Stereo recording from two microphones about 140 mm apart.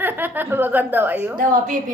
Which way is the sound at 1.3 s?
75° right (ahead or behind).